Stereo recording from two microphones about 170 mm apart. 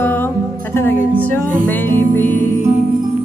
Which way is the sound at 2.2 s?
10° left (ahead or behind).